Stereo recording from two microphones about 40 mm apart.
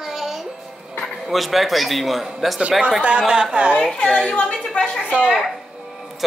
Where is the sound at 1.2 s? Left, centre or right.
Centre.